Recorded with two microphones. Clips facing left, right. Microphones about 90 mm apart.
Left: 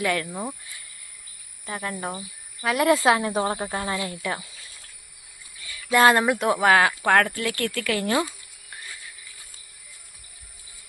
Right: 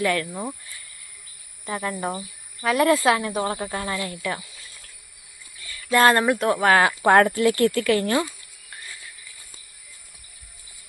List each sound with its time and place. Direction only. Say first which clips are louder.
0.0 s speech: right 2 dB; 10° left (ahead or behind)
1.6 s speech: right 3 dB; centre (ahead or behind)
2.9 s speech: even; 20° left (ahead or behind)
5.6 s speech: even; 10° left (ahead or behind)
7.0 s speech: right 5 dB; 15° right (ahead or behind)
8.0 s speech: right 1 dB; 15° left (ahead or behind)